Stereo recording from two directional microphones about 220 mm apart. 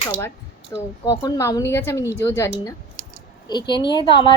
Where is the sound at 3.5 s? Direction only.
20° left (ahead or behind).